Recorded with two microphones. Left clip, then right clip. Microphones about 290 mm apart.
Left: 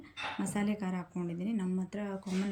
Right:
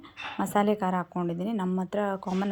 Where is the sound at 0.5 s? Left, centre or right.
Right.